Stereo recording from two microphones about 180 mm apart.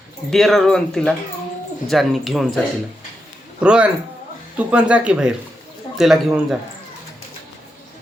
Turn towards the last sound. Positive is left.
turn(degrees=0)  # may be behind; listen again after turning